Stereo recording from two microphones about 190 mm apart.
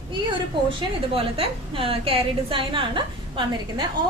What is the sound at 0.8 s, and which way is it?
A woman's voice, 30° right (ahead or behind).